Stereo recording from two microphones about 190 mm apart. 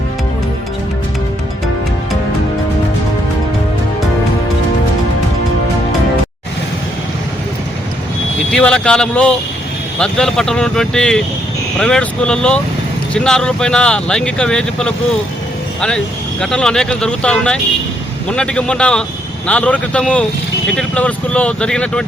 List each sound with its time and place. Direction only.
8.4 s speech: 5° left (ahead or behind)
16.4 s speech: 5° left (ahead or behind)